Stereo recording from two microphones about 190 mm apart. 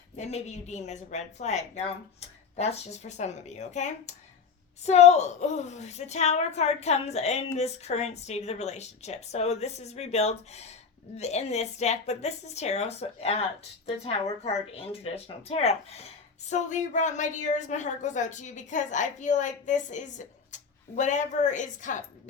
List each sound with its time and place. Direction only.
0.2 s a woman's voice: 35° left (ahead or behind)